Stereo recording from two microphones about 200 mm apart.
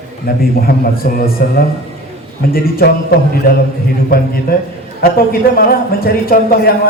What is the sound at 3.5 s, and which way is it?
Speech, 50° left (ahead or behind).